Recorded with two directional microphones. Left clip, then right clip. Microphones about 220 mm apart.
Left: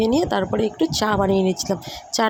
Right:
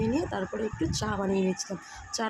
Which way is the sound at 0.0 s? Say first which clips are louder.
Left 10 dB; 30° left (ahead or behind).